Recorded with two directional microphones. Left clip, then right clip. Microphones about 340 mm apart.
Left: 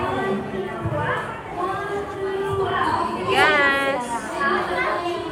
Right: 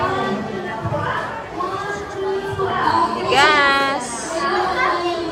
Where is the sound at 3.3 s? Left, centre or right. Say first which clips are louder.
Right 3 dB; centre.